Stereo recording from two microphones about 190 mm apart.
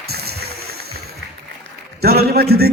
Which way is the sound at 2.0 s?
55° right (ahead or behind).